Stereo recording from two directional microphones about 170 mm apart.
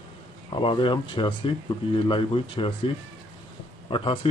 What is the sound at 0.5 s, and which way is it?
Speech, 30° left (ahead or behind).